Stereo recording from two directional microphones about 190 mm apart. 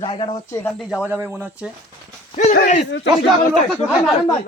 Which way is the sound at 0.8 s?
5° right (ahead or behind).